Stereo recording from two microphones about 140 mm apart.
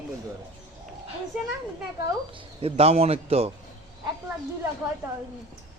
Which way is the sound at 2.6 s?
45° right (ahead or behind).